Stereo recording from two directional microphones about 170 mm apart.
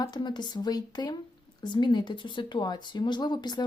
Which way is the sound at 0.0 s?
25° left (ahead or behind).